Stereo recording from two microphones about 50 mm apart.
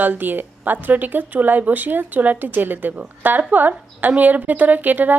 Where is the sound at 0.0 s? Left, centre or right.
Right.